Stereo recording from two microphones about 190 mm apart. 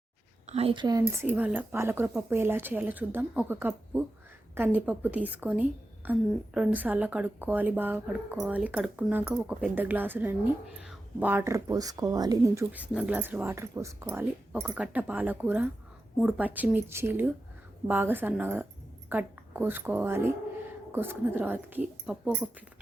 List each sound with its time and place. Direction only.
0.4 s a woman's voice: 30° right (ahead or behind); by 22.4 s centre (ahead or behind)